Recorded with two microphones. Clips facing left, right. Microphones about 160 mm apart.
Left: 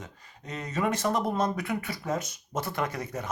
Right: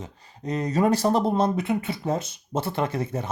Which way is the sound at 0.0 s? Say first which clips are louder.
Right 9 dB; 30° right (ahead or behind).